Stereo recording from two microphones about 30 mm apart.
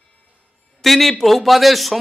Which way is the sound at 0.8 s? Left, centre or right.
Centre.